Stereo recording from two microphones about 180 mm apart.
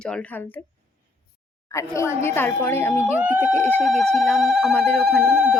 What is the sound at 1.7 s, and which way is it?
A woman's voice, 15° left (ahead or behind).